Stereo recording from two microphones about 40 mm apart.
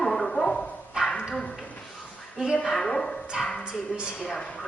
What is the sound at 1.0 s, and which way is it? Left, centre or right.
Bow-wow, right.